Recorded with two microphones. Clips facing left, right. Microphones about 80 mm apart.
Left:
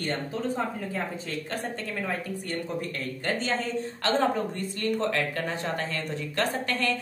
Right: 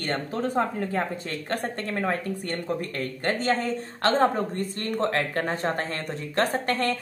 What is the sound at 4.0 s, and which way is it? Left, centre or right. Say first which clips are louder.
Speech: right 4 dB; right.